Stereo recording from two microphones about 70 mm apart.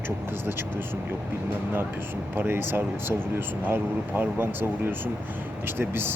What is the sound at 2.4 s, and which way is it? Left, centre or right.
Speech, right.